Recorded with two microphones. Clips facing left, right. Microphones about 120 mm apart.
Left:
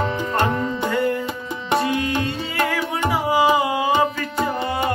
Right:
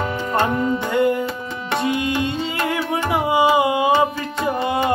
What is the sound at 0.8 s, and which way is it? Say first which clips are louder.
Music: right 1 dB; 20° right (ahead or behind).